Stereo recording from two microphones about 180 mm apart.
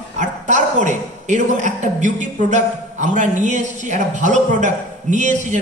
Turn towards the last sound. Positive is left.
turn(degrees=-45)  # may be behind; listen again after turning